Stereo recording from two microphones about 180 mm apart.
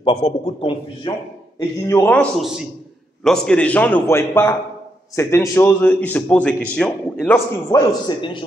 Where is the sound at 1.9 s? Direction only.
10° left (ahead or behind).